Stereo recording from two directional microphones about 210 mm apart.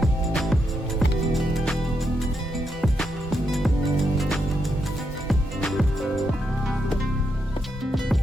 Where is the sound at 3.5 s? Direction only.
Centre (ahead or behind).